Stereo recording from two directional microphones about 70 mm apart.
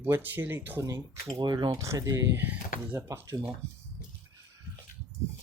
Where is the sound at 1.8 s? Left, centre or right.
Right.